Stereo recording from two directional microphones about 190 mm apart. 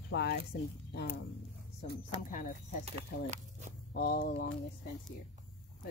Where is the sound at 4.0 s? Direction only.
50° left (ahead or behind).